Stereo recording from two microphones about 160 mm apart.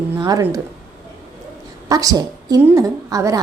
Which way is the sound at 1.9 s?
20° right (ahead or behind).